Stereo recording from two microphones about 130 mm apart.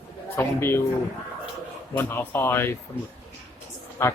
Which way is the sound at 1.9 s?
15° left (ahead or behind).